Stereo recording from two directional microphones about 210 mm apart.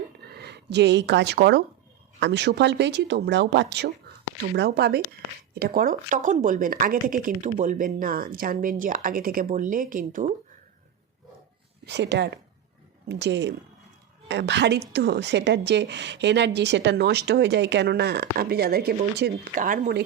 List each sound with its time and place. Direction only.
0.3 s a woman's voice: 55° right (ahead or behind)
11.9 s a woman's voice: 55° right (ahead or behind)